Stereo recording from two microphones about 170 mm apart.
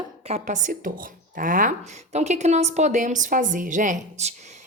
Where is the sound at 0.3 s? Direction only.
45° right (ahead or behind).